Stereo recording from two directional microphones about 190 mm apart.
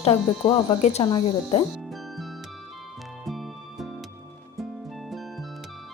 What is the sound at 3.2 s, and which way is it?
Music, centre (ahead or behind).